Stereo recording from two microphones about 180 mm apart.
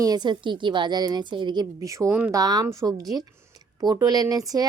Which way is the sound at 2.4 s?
20° right (ahead or behind).